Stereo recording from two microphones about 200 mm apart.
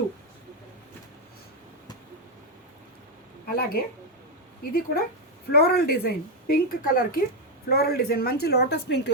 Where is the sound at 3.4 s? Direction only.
50° left (ahead or behind).